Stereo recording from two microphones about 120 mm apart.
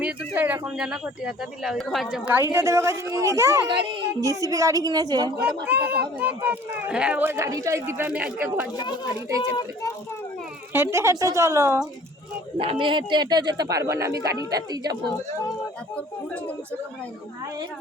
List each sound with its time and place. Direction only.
0.0 s speech: 15° right (ahead or behind)
2.3 s a woman's voice: 20° right (ahead or behind)
3.7 s speech: 40° right (ahead or behind)
4.2 s a woman's voice: 25° right (ahead or behind)
5.6 s speech: 15° right (ahead or behind)
10.7 s a woman's voice: 25° right (ahead or behind)
12.5 s speech: 45° right (ahead or behind)
16.0 s speech: 10° left (ahead or behind)